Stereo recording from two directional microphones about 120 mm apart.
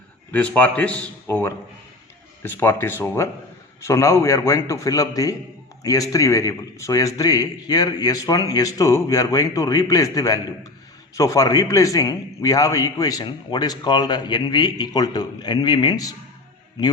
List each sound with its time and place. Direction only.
0.3 s a man's voice: 15° left (ahead or behind); by 16.1 s 35° left (ahead or behind)